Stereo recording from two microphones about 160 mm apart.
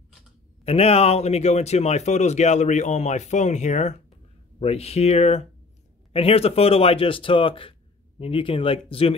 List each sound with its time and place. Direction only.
0.7 s speech: 40° left (ahead or behind)